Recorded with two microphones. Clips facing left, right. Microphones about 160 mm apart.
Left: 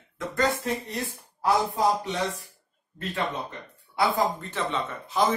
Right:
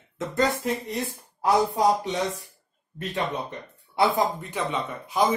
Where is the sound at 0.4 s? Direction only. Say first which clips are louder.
Right 2 dB; 20° right (ahead or behind).